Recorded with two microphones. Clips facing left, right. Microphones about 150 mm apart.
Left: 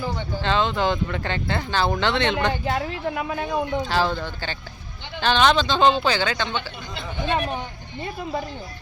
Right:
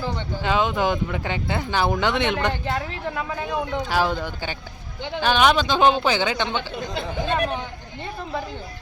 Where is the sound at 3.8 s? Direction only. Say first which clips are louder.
Even; 10° right (ahead or behind).